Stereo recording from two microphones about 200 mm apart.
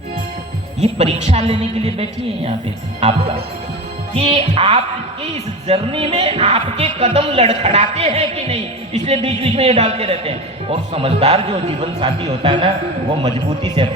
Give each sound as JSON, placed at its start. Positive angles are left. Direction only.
{"t": 0.8, "sound": "a woman's voice", "side_deg": -35}